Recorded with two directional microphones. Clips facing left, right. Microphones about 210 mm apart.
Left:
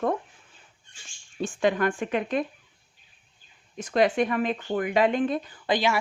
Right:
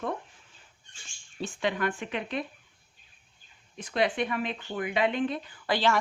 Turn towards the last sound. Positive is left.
turn(degrees=15)  # may be behind; listen again after turning